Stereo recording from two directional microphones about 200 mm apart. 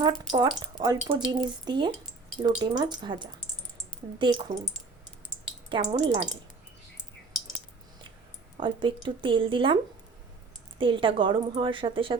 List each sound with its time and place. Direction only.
0.0 s speech: 20° right (ahead or behind)
5.6 s speech: 25° right (ahead or behind)
8.6 s speech: 25° right (ahead or behind)
10.8 s speech: 25° right (ahead or behind)